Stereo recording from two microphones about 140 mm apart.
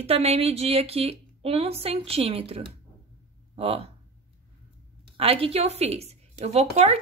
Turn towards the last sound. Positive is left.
turn(degrees=-50)  # may be behind; listen again after turning